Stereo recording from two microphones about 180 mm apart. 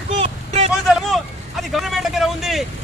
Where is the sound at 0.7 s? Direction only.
Centre (ahead or behind).